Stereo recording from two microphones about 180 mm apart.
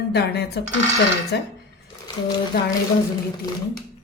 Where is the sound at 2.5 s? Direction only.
60° left (ahead or behind).